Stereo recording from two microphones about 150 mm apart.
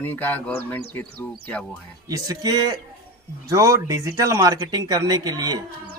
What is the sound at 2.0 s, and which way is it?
Speech, 25° right (ahead or behind).